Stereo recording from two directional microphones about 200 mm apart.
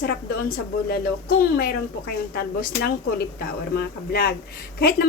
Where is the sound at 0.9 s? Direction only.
45° left (ahead or behind).